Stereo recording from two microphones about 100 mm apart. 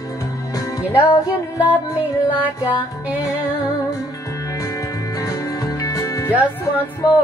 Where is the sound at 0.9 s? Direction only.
20° left (ahead or behind).